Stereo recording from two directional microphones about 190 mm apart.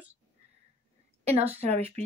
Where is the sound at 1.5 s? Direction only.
35° right (ahead or behind).